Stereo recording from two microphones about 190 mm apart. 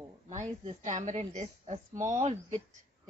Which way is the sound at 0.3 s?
40° right (ahead or behind).